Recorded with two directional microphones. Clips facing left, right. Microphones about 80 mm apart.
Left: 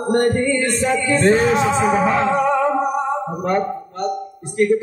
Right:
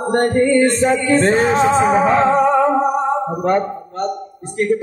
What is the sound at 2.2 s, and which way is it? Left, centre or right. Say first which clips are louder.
Music: right 4 dB; right.